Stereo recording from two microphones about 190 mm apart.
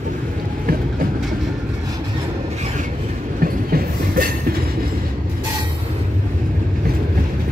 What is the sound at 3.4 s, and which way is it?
Train, 50° right (ahead or behind).